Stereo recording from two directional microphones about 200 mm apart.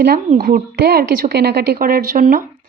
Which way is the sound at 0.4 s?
45° right (ahead or behind).